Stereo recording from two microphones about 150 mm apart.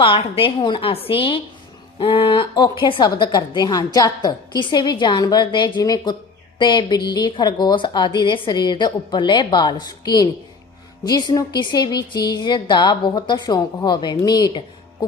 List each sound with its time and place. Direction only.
0.0 s a woman's voice: 35° left (ahead or behind)